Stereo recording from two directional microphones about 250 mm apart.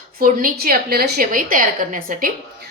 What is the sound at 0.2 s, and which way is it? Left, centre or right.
A woman's voice, right.